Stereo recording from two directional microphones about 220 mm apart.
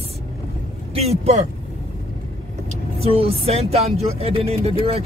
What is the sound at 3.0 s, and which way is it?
Speech, 25° right (ahead or behind).